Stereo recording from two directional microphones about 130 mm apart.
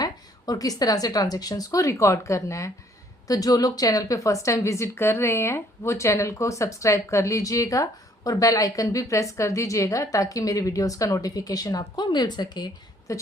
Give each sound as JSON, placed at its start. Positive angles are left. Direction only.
{"t": 0.0, "sound": "a woman's voice", "side_deg": 30}